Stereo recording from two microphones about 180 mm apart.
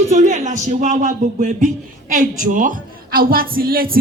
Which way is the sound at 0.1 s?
40° right (ahead or behind).